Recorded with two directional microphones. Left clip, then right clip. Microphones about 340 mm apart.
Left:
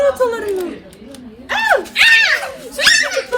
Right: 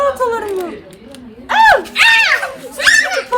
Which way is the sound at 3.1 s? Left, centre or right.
Centre.